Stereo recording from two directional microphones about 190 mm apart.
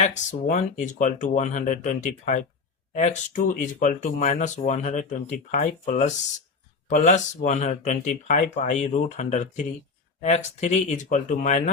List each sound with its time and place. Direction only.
0.0 s speech: 40° left (ahead or behind)